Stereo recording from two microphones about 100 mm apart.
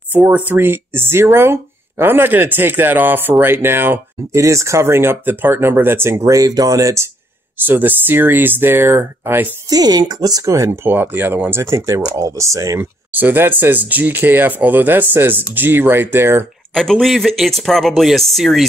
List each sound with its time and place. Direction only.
0.1 s speech: 15° right (ahead or behind); by 7.1 s 35° right (ahead or behind)
7.5 s speech: 20° right (ahead or behind)
9.7 s speech: 40° right (ahead or behind)
13.1 s speech: 20° right (ahead or behind)
16.7 s speech: 5° left (ahead or behind)